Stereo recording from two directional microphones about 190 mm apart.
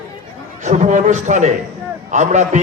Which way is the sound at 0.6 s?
40° right (ahead or behind).